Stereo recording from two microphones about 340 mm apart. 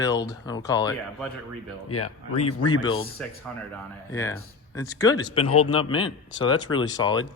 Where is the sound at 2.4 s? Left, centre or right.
Centre.